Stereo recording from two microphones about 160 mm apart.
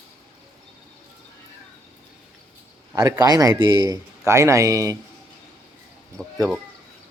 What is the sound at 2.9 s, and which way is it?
A man's voice, 20° right (ahead or behind).